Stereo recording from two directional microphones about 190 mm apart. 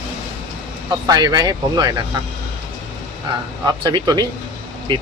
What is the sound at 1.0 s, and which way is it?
Speech, 20° right (ahead or behind).